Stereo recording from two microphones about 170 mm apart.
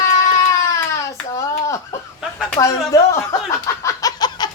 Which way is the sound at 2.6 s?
20° left (ahead or behind).